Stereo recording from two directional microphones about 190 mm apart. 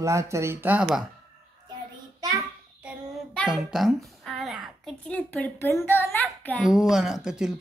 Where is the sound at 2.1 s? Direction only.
20° right (ahead or behind).